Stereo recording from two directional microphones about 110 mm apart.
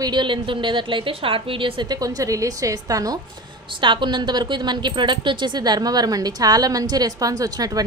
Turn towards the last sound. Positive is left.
turn(degrees=-35)  # may be behind; listen again after turning